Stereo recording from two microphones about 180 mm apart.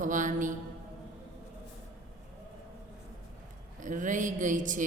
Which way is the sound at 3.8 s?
45° right (ahead or behind).